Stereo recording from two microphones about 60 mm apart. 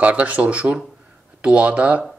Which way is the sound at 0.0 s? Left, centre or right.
Right.